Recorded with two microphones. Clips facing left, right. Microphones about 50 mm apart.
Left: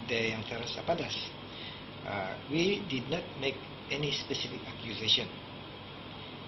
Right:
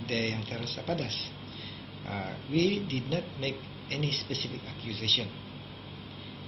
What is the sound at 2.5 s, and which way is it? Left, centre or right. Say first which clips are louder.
A man's voice: right 3 dB; centre.